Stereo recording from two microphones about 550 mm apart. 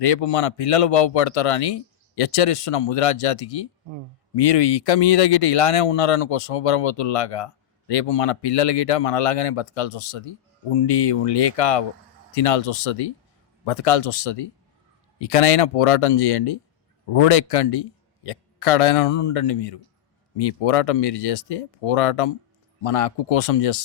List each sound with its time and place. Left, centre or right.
0.0 s speech: left